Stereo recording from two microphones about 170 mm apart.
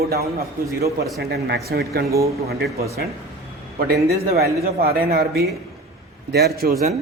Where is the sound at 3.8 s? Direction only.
70° right (ahead or behind).